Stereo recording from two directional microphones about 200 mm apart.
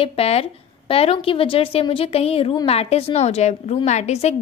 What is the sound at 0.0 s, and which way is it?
A woman's voice, 30° left (ahead or behind).